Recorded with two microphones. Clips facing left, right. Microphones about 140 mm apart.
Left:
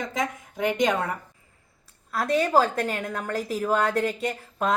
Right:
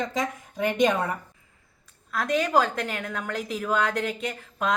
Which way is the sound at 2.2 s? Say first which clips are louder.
Left 2 dB; 30° left (ahead or behind).